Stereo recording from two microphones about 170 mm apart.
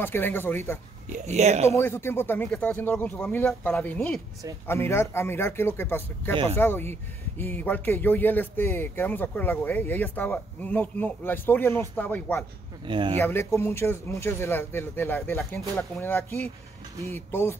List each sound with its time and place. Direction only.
0.0 s speech: 10° left (ahead or behind)
1.0 s speech: 45° right (ahead or behind)
1.8 s speech: 15° left (ahead or behind)
6.3 s speech: 35° right (ahead or behind)
6.6 s speech: 15° left (ahead or behind)
12.8 s speech: 30° right (ahead or behind)
13.2 s speech: 15° left (ahead or behind)